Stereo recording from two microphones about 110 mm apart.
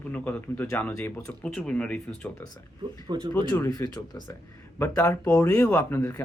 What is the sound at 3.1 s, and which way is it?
Speech, 40° right (ahead or behind).